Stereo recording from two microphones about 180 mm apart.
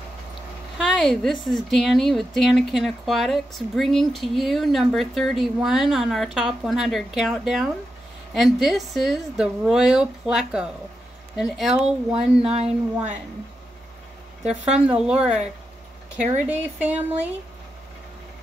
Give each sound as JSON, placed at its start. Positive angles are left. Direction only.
{"t": 0.7, "sound": "a woman's voice", "side_deg": 0}
{"t": 12.4, "sound": "speech", "side_deg": -35}
{"t": 14.4, "sound": "a woman's voice", "side_deg": -5}
{"t": 16.4, "sound": "a woman's voice", "side_deg": -10}